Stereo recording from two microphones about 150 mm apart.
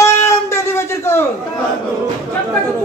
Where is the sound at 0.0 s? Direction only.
20° left (ahead or behind).